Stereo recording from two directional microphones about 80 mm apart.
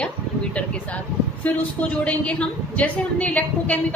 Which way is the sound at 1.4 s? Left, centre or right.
Centre.